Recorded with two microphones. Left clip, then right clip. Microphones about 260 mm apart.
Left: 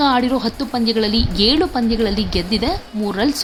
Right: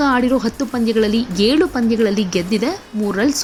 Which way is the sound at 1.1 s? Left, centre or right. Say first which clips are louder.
Left 1 dB; right.